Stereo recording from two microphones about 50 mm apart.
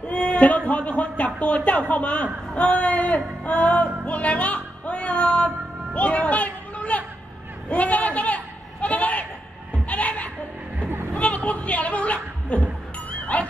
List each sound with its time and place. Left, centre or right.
0.0 s speech: left
3.4 s music: left
5.9 s a sound: left
8.8 s bleat: left
9.8 s a sound: left
13.3 s dog: left